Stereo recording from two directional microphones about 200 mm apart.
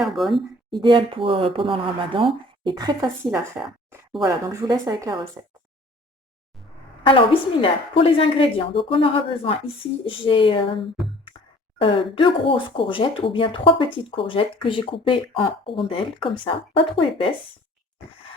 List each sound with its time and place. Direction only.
0.0 s speech: centre (ahead or behind)
0.7 s a woman's voice: 20° right (ahead or behind)
7.0 s speech: 25° left (ahead or behind)